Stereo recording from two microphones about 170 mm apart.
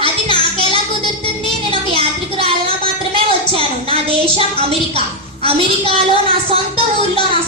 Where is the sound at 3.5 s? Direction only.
35° right (ahead or behind).